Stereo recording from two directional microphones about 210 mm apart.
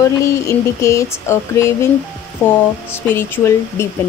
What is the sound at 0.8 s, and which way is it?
Speech, 15° left (ahead or behind).